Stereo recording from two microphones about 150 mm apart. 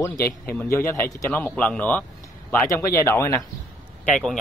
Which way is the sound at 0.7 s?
20° left (ahead or behind).